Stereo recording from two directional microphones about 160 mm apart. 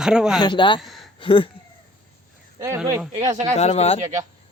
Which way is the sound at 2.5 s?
20° right (ahead or behind).